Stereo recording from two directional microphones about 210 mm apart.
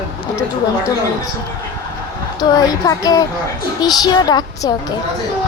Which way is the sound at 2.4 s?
15° left (ahead or behind).